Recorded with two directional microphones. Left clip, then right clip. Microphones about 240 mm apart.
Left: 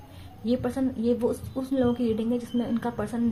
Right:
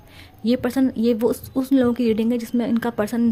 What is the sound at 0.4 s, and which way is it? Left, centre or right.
Speech, right.